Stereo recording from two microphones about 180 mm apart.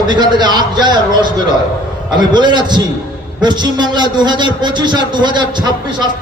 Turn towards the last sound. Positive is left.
turn(degrees=-25)  # may be behind; listen again after turning